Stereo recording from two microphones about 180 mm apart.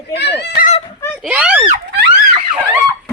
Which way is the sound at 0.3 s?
65° left (ahead or behind).